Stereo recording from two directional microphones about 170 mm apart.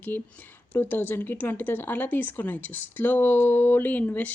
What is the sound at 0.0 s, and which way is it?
Speech, 10° left (ahead or behind).